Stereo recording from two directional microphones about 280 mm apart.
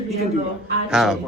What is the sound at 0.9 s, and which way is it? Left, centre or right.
Speech, centre.